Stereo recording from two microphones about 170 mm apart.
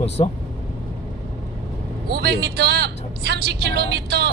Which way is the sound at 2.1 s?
70° right (ahead or behind).